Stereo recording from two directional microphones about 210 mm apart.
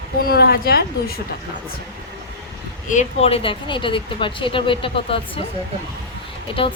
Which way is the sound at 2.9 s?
30° left (ahead or behind).